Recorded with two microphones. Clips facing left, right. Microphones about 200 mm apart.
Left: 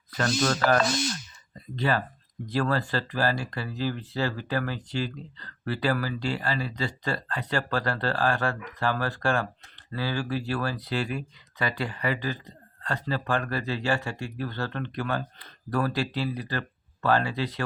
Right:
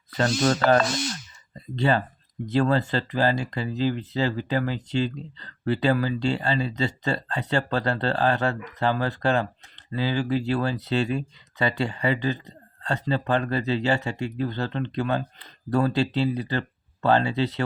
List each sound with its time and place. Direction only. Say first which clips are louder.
0.2 s speech: right 3 dB; 25° right (ahead or behind)